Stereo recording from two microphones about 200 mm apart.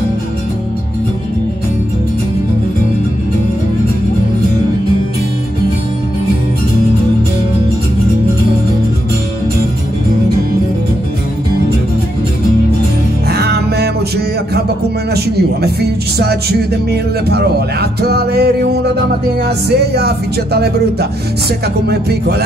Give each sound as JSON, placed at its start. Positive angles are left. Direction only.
{"t": 13.3, "sound": "music", "side_deg": -55}
{"t": 15.1, "sound": "speech", "side_deg": -55}